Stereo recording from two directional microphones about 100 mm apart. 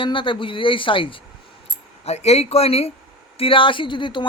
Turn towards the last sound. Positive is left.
turn(degrees=50)  # may be behind; listen again after turning